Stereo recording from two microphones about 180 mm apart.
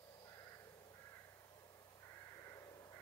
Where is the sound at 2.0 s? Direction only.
15° left (ahead or behind).